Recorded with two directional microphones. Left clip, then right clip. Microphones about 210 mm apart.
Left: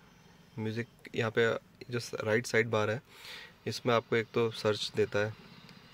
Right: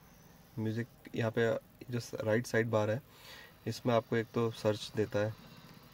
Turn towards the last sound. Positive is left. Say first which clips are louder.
# left 3 dB
turn(degrees=5)  # may be behind; listen again after turning